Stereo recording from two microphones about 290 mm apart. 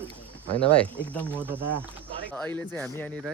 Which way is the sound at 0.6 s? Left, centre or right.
Centre.